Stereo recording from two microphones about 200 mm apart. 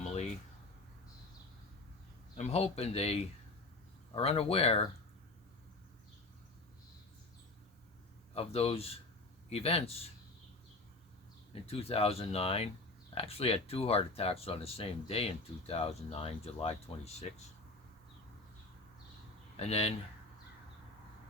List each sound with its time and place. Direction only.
0.0 s a sound: 35° left (ahead or behind)
2.4 s speech: 30° left (ahead or behind)
8.3 s speech: 30° left (ahead or behind)
11.6 s speech: 30° left (ahead or behind)
19.5 s speech: 30° left (ahead or behind)